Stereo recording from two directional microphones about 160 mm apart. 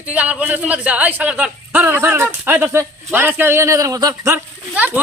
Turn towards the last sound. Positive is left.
turn(degrees=-10)  # may be behind; listen again after turning